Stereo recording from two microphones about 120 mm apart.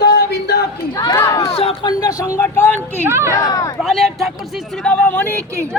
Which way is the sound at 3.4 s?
30° left (ahead or behind).